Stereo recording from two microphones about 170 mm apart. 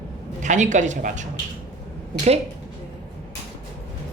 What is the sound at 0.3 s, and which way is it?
Speech, 45° right (ahead or behind).